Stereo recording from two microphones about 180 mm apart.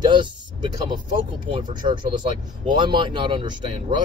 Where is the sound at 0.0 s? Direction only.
25° right (ahead or behind).